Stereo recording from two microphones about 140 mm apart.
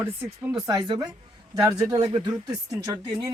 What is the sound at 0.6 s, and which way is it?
Speech, 30° right (ahead or behind).